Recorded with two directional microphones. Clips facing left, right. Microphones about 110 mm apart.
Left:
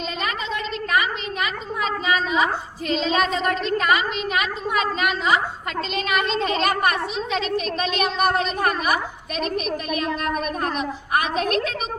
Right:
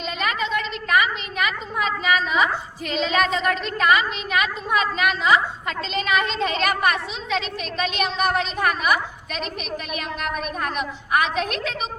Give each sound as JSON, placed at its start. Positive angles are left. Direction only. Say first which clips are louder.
{"t": 0.2, "sound": "a woman's voice", "louder": "right 5 dB", "side_deg": 35}